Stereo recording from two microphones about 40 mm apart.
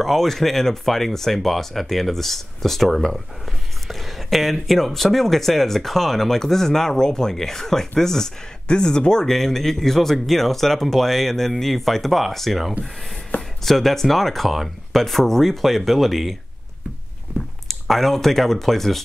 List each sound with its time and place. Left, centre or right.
0.0 s speech: centre
13.3 s a sound: left
13.7 s speech: centre
17.6 s speech: centre